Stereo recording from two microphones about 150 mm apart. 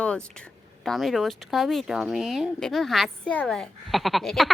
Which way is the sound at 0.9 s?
Centre (ahead or behind).